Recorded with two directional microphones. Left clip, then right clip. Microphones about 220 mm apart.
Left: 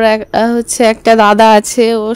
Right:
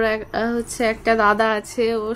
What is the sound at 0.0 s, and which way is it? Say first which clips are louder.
A woman's voice: left 11 dB; 40° left (ahead or behind).